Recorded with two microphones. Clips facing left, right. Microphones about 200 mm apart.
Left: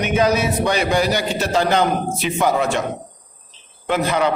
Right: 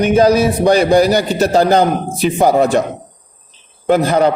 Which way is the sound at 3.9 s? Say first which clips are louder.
Right 7 dB; 40° right (ahead or behind).